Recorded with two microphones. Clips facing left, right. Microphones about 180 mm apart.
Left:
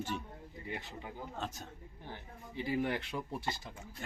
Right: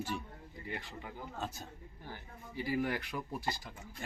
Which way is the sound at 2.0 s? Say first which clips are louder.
Left 1 dB; 20° left (ahead or behind).